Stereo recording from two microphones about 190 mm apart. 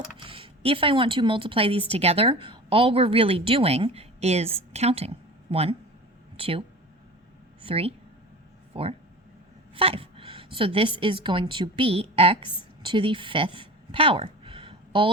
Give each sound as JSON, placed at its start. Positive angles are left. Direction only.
{"t": 0.2, "sound": "a woman's voice", "side_deg": -30}